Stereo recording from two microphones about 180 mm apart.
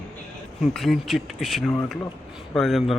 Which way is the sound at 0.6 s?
Centre (ahead or behind).